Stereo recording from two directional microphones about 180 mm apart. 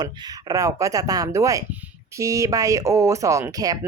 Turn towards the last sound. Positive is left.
turn(degrees=-20)  # may be behind; listen again after turning